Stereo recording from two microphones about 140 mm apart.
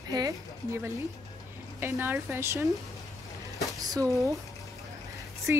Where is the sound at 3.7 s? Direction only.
25° right (ahead or behind).